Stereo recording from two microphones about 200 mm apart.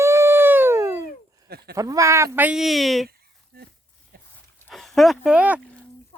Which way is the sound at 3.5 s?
50° right (ahead or behind).